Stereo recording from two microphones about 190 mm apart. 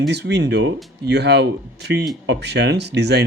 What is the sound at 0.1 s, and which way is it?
Speech, 65° right (ahead or behind).